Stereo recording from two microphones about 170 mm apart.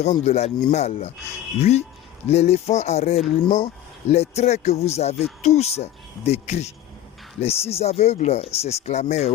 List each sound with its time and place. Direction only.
0.0 s speech: 40° left (ahead or behind)
2.2 s speech: 40° left (ahead or behind)